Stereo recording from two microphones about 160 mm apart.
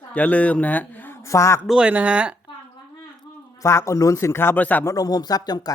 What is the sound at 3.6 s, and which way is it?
A man's voice, 20° left (ahead or behind).